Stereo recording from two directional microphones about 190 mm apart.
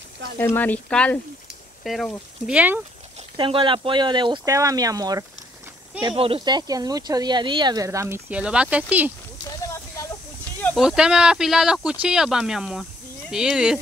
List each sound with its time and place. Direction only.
0.4 s speech: 10° left (ahead or behind); by 2.8 s 5° right (ahead or behind)
3.3 s speech: 25° right (ahead or behind)
6.0 s speech: 30° right (ahead or behind); by 9.1 s 10° right (ahead or behind)
9.5 s a sound: 15° left (ahead or behind)
10.8 s speech: 5° right (ahead or behind)